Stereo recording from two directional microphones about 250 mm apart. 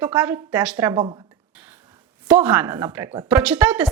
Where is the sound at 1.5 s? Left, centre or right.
Centre.